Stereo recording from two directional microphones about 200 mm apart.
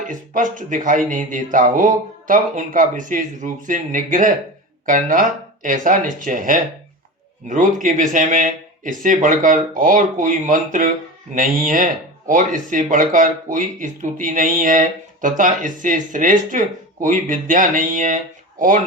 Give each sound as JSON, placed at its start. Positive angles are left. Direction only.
{"t": 0.1, "sound": "speech", "side_deg": -40}